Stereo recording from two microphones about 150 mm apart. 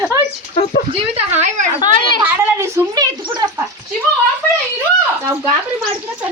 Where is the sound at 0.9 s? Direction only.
45° right (ahead or behind).